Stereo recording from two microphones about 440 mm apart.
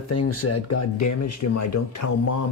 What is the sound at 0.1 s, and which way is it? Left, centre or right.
Speech, left.